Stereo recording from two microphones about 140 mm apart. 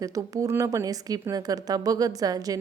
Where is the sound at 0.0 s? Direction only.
25° right (ahead or behind).